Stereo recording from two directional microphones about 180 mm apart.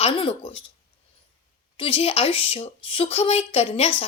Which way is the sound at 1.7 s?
30° left (ahead or behind).